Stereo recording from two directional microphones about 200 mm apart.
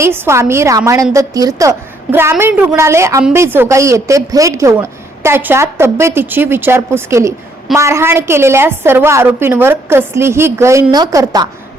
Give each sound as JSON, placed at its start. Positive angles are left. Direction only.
{"t": 0.0, "sound": "a woman's voice", "side_deg": -15}